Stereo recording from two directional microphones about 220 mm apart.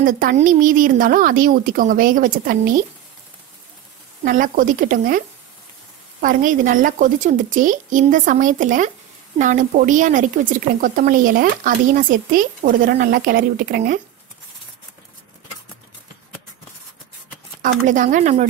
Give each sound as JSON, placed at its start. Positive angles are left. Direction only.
{"t": 0.0, "sound": "speech", "side_deg": -40}
{"t": 4.2, "sound": "speech", "side_deg": -35}
{"t": 6.2, "sound": "speech", "side_deg": -40}
{"t": 17.6, "sound": "speech", "side_deg": -35}